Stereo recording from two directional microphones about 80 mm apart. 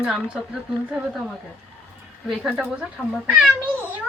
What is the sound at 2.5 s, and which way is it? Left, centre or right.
Speech, centre.